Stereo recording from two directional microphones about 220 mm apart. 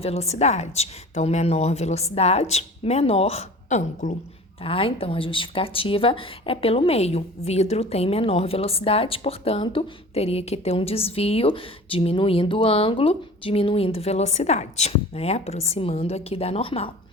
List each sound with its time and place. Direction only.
0.0 s speech: 30° left (ahead or behind)